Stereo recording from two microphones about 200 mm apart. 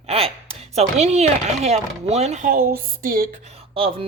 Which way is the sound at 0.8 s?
35° right (ahead or behind).